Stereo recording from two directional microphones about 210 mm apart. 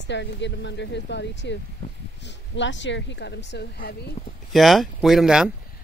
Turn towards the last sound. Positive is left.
turn(degrees=-5)  # may be behind; listen again after turning